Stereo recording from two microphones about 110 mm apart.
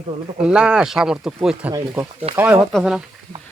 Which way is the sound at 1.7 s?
30° right (ahead or behind).